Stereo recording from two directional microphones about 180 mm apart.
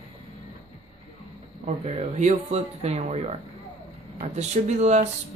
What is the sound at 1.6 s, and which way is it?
Speech, 40° right (ahead or behind).